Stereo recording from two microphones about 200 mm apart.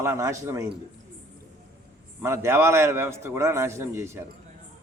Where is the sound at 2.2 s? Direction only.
10° right (ahead or behind).